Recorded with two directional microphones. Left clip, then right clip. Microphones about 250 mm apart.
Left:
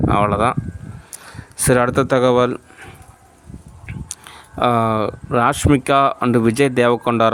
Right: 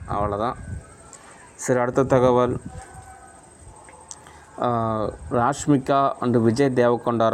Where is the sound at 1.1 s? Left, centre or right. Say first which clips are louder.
Left 7 dB; left.